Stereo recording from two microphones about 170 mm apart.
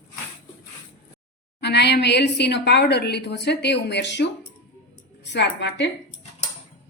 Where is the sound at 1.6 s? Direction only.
80° left.